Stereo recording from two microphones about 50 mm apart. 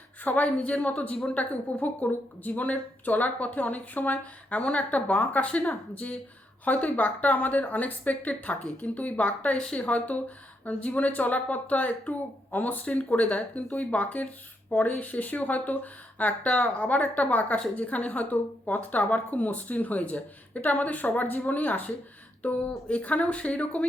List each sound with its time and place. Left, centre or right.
0.3 s speech: left